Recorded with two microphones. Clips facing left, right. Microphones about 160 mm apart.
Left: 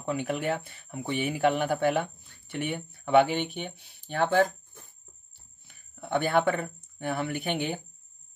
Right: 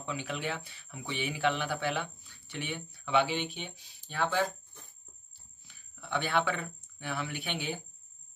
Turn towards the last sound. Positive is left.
turn(degrees=50)  # may be behind; listen again after turning